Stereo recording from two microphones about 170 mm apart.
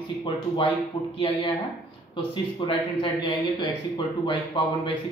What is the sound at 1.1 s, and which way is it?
Speech, 35° left (ahead or behind).